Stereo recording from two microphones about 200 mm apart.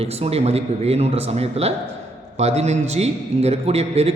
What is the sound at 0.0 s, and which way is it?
A man's voice, 30° right (ahead or behind).